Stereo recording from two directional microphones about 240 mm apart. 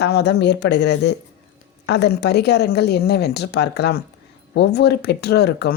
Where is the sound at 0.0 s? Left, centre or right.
Left.